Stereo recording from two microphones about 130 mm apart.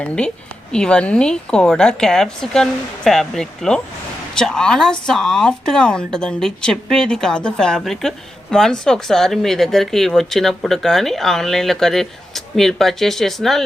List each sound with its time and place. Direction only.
0.7 s speech: 5° left (ahead or behind)